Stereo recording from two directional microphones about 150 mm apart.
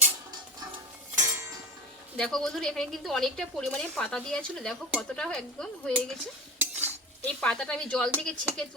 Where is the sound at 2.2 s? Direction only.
5° left (ahead or behind).